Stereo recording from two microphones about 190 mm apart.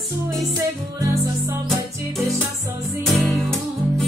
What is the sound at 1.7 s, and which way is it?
Music, centre (ahead or behind).